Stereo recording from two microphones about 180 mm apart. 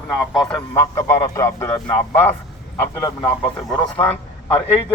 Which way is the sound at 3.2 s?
30° left (ahead or behind).